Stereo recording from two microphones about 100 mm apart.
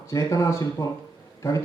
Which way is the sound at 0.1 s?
30° left (ahead or behind).